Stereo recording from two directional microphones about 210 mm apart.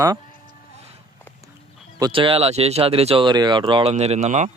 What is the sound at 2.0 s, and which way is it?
Speech, 20° right (ahead or behind).